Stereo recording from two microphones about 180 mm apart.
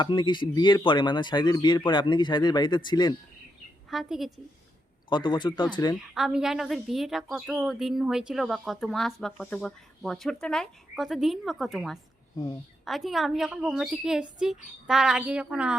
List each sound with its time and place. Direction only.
0.0 s speech: 25° left (ahead or behind)
3.8 s a woman's voice: centre (ahead or behind)
5.0 s speech: 25° left (ahead or behind)
6.1 s a woman's voice: centre (ahead or behind)